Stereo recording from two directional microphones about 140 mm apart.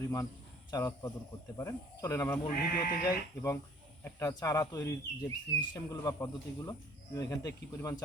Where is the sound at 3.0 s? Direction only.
25° left (ahead or behind).